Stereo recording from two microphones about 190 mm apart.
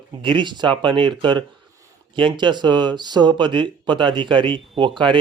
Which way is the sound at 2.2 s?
25° right (ahead or behind).